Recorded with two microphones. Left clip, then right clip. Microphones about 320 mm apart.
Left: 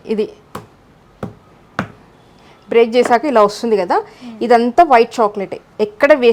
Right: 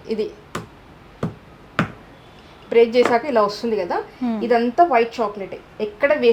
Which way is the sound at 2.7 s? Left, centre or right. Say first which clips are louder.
Left 3 dB; left.